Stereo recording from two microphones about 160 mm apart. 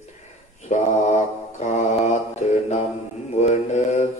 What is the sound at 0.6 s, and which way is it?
Mantra, 45° left (ahead or behind).